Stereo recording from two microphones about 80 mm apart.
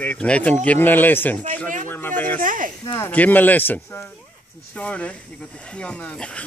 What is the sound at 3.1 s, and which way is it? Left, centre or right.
A man's voice, left.